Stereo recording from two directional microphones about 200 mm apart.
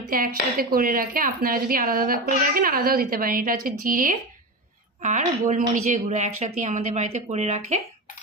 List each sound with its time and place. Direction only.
0.1 s a woman's voice: 45° right (ahead or behind)